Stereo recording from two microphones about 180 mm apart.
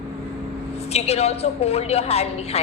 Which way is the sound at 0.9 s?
35° left (ahead or behind).